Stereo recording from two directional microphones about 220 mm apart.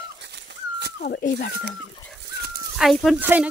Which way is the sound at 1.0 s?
40° left (ahead or behind).